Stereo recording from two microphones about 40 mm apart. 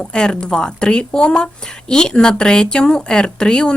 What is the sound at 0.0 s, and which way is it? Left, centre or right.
Speech, left.